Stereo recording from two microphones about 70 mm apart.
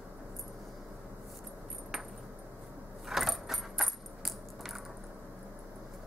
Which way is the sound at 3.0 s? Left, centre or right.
Centre.